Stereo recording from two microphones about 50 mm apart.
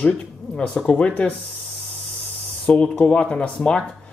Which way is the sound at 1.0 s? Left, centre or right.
Left.